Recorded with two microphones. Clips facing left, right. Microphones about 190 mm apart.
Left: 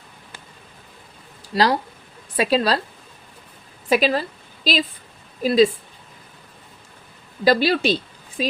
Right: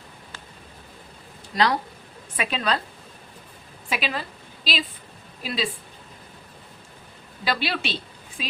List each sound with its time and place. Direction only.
1.5 s speech: 35° left (ahead or behind)
3.8 s a woman's voice: 40° left (ahead or behind)
7.4 s speech: 40° left (ahead or behind)